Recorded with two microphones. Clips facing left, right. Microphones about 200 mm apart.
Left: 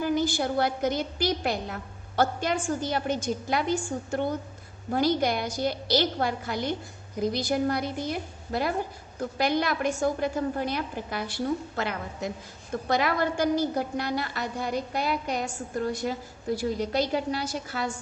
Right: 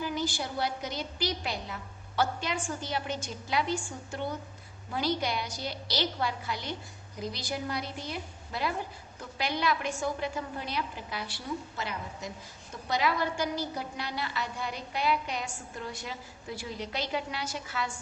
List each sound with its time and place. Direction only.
0.0 s a woman's voice: 50° left (ahead or behind)